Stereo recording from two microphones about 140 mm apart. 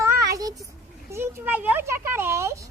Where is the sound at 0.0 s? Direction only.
25° right (ahead or behind).